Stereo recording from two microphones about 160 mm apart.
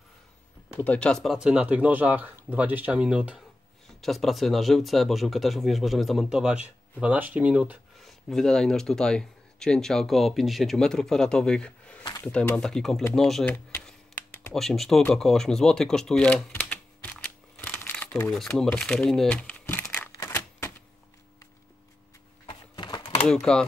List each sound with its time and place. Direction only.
0.7 s speech: 10° left (ahead or behind)
12.0 s a sound: 20° left (ahead or behind)
12.3 s speech: 5° left (ahead or behind)
13.0 s typing: 5° left (ahead or behind)
18.6 s speech: 5° left (ahead or behind)
20.2 s typewriter: 15° left (ahead or behind)
22.5 s a sound: 30° left (ahead or behind)
23.2 s speech: 5° left (ahead or behind)